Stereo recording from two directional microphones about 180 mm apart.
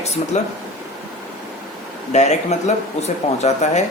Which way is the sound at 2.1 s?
40° left (ahead or behind).